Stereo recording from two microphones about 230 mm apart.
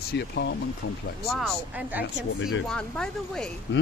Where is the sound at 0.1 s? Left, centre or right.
Left.